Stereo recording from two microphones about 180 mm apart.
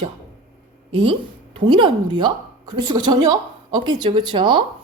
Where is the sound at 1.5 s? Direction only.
25° right (ahead or behind).